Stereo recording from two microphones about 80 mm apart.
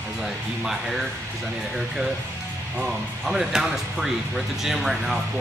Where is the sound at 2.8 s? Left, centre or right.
Centre.